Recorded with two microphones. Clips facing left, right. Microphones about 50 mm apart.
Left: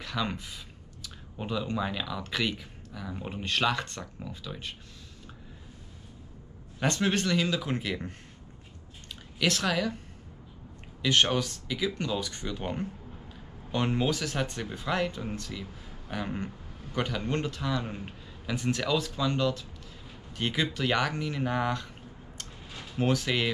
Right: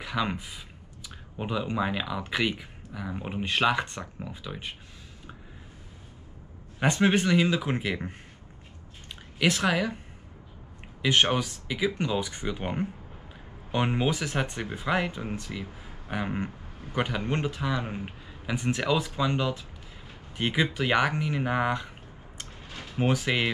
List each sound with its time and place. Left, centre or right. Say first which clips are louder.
0.0 s speech: right 3 dB; centre
6.8 s speech: right 4 dB; centre
9.4 s speech: right 3 dB; centre
11.0 s speech: right 2 dB; centre
22.4 s a sound: right 2 dB; centre